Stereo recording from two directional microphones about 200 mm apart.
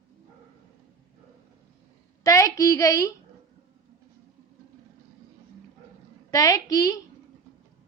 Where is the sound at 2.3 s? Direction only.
15° left (ahead or behind).